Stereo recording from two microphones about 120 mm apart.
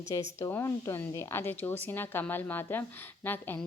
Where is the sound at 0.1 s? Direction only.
25° left (ahead or behind).